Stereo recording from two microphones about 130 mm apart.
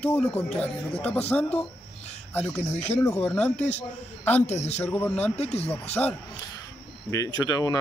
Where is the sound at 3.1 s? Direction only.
10° left (ahead or behind).